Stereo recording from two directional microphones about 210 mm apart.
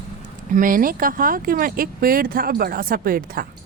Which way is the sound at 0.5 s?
40° right (ahead or behind).